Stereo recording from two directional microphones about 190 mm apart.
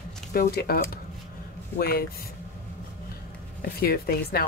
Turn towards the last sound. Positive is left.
turn(degrees=55)  # may be behind; listen again after turning